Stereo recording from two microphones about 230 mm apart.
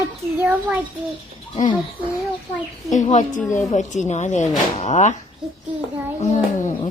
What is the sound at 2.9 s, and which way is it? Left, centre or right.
A woman's voice, left.